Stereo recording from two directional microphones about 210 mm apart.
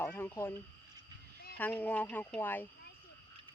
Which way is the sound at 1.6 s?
10° left (ahead or behind).